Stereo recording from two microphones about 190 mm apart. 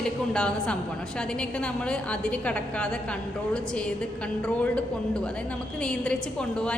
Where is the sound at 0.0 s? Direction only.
5° left (ahead or behind).